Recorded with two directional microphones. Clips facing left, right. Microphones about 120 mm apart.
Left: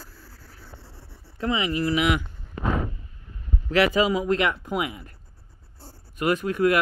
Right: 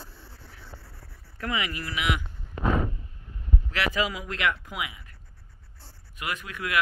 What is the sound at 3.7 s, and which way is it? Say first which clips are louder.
Speech: left 8 dB; 30° left (ahead or behind).